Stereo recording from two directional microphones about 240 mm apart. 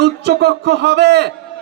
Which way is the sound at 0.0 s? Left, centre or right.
Right.